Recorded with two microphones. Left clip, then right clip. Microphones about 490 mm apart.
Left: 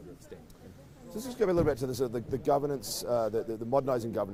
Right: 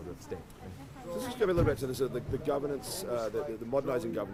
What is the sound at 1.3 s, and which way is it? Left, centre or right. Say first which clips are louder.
A man's voice: left 2 dB; left.